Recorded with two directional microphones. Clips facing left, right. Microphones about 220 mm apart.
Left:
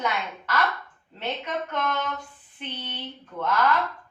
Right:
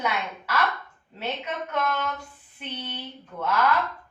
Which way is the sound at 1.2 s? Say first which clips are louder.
Left 1 dB; 5° right (ahead or behind).